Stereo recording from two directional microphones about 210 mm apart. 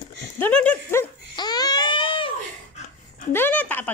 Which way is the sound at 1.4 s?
20° left (ahead or behind).